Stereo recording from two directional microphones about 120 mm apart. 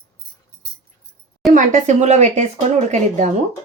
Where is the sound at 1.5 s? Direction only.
85° right; by 2.5 s 70° right (ahead or behind).